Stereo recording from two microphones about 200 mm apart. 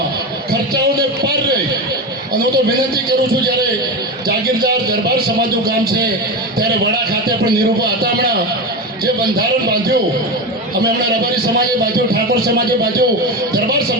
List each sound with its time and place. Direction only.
4.3 s a man's voice: 50° right (ahead or behind)
7.8 s a sound: 50° right (ahead or behind)
12.3 s a man's voice: 50° right (ahead or behind)